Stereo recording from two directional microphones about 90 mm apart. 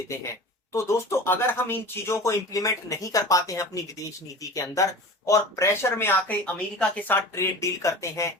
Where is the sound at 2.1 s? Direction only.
40° left (ahead or behind).